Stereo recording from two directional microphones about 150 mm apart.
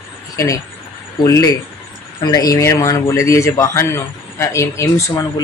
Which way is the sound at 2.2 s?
25° left (ahead or behind).